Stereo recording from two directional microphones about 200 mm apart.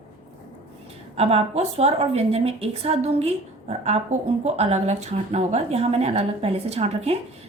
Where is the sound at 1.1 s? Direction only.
30° right (ahead or behind).